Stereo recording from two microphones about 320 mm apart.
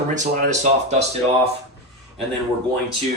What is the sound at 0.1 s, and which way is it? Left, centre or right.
Speech, right.